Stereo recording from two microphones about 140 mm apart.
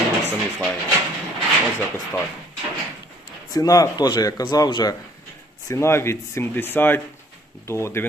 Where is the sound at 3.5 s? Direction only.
25° left (ahead or behind).